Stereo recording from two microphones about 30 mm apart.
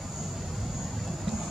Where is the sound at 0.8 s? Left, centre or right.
Centre.